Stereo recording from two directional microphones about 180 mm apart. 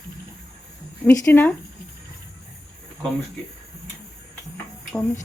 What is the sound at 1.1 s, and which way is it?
Speech, 15° left (ahead or behind).